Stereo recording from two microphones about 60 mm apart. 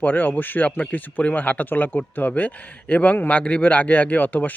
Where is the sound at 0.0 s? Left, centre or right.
Left.